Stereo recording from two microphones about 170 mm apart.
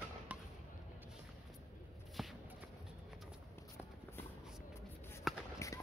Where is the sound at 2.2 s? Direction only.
Centre (ahead or behind).